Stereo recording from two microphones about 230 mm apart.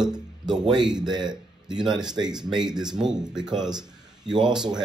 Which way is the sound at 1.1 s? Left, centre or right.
Centre.